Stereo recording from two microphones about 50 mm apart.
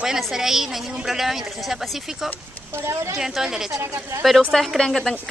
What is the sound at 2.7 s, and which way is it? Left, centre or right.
Speech, right.